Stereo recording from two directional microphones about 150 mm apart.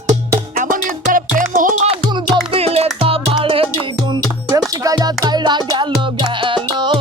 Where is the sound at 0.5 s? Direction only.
65° right (ahead or behind).